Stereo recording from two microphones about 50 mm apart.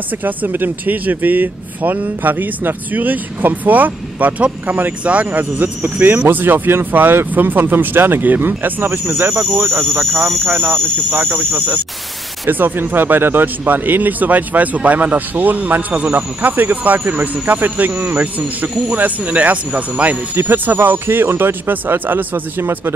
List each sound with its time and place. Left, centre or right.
0.2 s speech: right
20.3 s speech: right